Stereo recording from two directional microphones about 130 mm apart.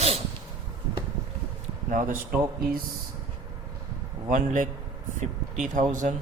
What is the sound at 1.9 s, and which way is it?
Speech, 90° right.